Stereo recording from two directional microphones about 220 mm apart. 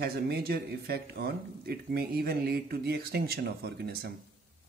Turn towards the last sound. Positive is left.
turn(degrees=-45)  # may be behind; listen again after turning